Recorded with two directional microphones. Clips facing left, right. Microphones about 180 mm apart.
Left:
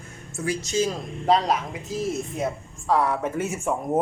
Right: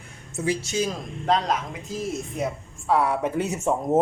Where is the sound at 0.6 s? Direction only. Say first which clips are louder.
Left 2 dB; centre (ahead or behind).